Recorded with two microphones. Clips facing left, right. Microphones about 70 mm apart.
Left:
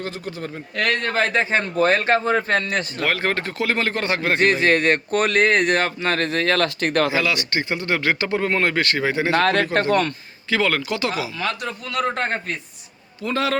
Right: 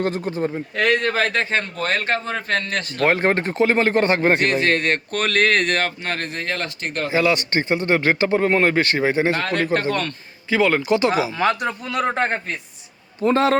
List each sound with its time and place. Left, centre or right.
0.0 s speech: right
0.5 s a man's voice: centre
1.3 s speech: centre
1.7 s speech: left
3.0 s speech: right
4.4 s speech: left
5.7 s speech: left
6.1 s speech: left
7.2 s speech: right
9.3 s a man's voice: left
9.9 s speech: left
10.5 s a man's voice: centre
12.0 s a man's voice: centre
13.2 s speech: right